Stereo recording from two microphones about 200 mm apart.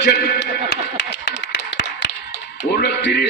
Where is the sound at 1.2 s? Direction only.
60° left (ahead or behind).